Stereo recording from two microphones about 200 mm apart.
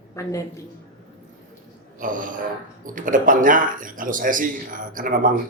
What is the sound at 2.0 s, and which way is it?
A man's voice, 40° right (ahead or behind).